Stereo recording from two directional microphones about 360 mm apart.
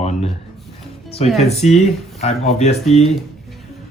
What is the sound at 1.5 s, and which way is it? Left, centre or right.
Speech, centre.